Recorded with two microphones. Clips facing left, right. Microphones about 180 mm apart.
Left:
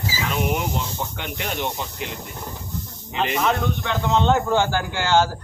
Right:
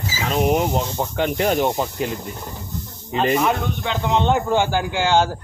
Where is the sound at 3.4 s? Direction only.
15° right (ahead or behind).